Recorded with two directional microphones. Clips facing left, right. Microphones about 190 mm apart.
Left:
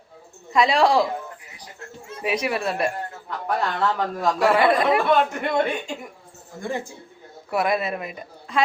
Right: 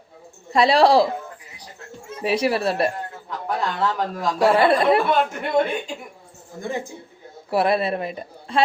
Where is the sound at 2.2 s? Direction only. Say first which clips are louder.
Right 4 dB; 30° right (ahead or behind).